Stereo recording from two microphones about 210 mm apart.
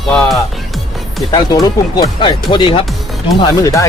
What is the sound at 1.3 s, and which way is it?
Speech, 20° left (ahead or behind).